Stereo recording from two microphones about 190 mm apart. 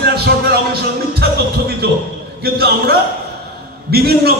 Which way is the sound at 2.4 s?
55° right (ahead or behind).